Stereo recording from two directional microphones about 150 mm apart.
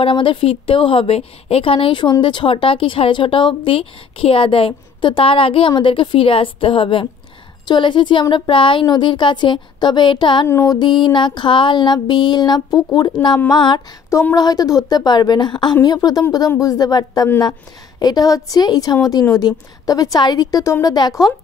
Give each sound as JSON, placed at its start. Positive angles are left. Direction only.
{"t": 0.0, "sound": "speech", "side_deg": 35}
{"t": 10.5, "sound": "a woman's voice", "side_deg": 20}
{"t": 10.8, "sound": "a woman's voice", "side_deg": 30}